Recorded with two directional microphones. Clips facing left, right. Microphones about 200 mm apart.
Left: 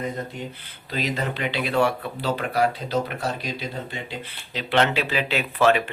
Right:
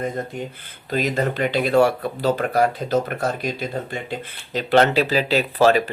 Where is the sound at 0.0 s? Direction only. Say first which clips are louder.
Right 3 dB; 50° right (ahead or behind).